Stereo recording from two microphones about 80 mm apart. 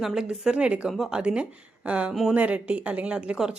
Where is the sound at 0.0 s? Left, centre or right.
Centre.